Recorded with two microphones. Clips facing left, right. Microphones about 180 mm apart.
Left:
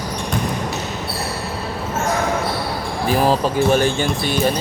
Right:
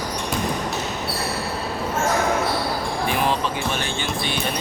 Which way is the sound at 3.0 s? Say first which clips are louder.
Left 7 dB; 35° left (ahead or behind).